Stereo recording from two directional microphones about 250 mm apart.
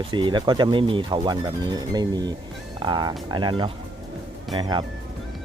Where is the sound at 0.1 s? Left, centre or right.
Centre.